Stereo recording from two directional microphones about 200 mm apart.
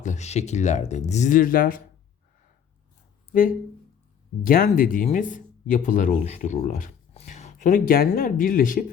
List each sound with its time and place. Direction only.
0.0 s speech: 35° left (ahead or behind)
4.4 s speech: 45° left (ahead or behind)